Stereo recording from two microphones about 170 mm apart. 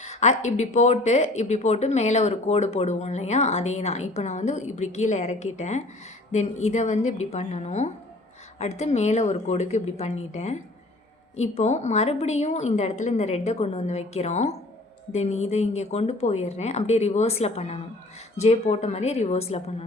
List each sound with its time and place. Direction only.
0.0 s a woman's voice: 40° left (ahead or behind)